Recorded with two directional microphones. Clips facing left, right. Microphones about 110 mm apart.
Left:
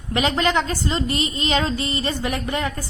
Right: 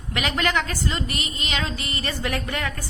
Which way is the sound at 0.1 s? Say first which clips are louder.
Left 4 dB; 30° left (ahead or behind).